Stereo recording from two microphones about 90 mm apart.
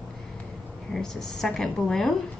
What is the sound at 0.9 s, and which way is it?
A woman's voice, 5° left (ahead or behind).